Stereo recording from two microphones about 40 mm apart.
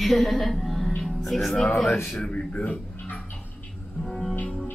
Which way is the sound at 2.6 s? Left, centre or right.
Left.